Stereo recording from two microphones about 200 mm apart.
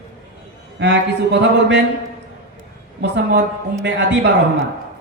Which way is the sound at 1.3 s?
60° right (ahead or behind).